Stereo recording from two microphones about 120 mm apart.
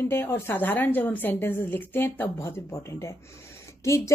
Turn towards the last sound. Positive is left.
turn(degrees=25)  # may be behind; listen again after turning